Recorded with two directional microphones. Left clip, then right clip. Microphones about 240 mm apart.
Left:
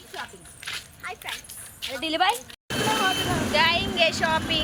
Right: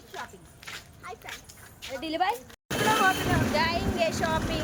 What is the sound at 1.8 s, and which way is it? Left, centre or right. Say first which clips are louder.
Speech: left 4 dB; centre.